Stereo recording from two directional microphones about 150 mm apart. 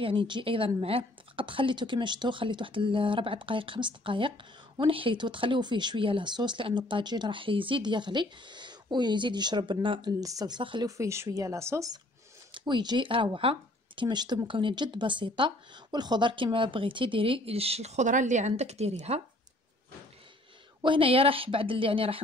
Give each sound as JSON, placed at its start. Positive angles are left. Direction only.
{"t": 0.0, "sound": "speech", "side_deg": -35}
{"t": 10.9, "sound": "speech", "side_deg": -20}
{"t": 20.8, "sound": "speech", "side_deg": -35}